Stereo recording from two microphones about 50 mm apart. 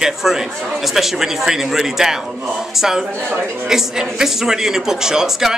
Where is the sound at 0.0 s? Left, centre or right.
Centre.